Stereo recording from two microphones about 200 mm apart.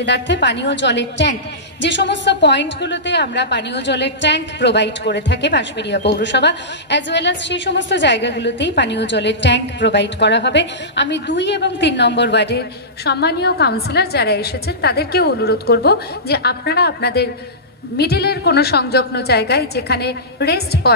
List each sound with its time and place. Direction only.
0.0 s a woman's voice: 60° left (ahead or behind)